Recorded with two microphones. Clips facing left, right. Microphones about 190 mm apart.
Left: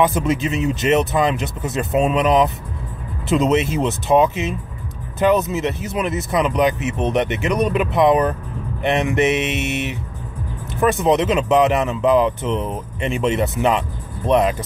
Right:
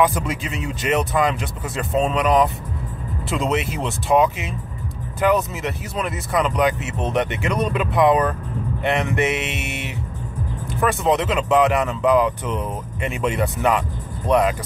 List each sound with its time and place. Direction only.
0.0 s speech: 25° left (ahead or behind)